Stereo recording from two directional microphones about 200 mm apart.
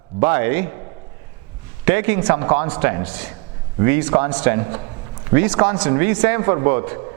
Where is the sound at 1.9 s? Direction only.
15° right (ahead or behind).